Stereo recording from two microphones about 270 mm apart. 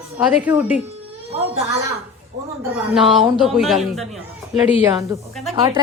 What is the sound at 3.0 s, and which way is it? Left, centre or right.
A man's voice, centre.